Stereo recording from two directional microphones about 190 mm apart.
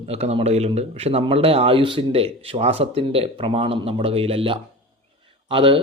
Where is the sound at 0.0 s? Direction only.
35° right (ahead or behind).